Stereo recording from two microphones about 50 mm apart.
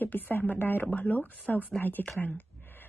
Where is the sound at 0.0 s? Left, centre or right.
Left.